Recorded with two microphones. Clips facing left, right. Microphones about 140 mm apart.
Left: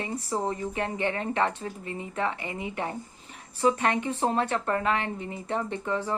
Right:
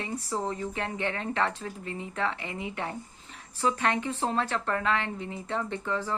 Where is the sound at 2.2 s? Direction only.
5° left (ahead or behind).